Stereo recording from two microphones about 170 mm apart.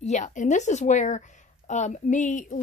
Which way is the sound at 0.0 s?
45° left (ahead or behind).